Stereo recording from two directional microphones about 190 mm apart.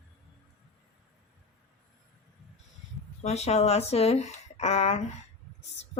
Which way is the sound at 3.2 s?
35° left (ahead or behind).